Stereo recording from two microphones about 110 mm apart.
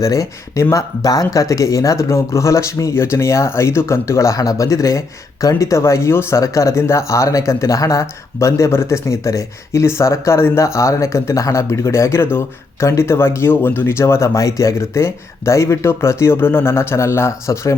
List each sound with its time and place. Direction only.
0.0 s speech: 30° left (ahead or behind)